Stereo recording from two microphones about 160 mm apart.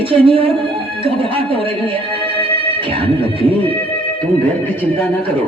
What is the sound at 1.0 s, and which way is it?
Speech, 35° right (ahead or behind).